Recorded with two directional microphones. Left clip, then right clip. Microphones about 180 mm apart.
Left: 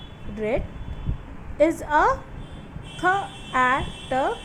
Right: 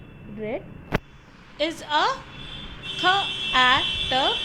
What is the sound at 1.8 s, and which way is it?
Speech, 40° left (ahead or behind).